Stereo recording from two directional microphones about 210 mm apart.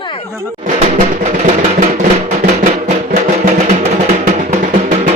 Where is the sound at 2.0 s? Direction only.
35° right (ahead or behind).